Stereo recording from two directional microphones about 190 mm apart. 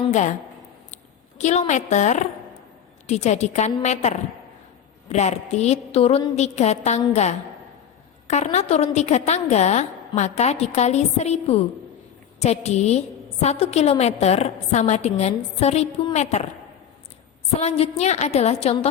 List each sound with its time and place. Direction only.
1.4 s a woman's voice: 40° left (ahead or behind)
17.6 s a woman's voice: 35° left (ahead or behind)